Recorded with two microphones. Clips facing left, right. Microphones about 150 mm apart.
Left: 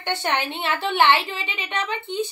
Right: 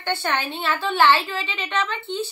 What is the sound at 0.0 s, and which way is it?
A woman's voice, 20° left (ahead or behind).